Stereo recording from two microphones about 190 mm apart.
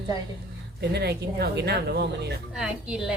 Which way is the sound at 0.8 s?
60° right (ahead or behind).